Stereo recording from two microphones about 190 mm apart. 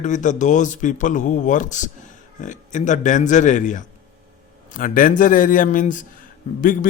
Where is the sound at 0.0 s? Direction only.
40° left (ahead or behind).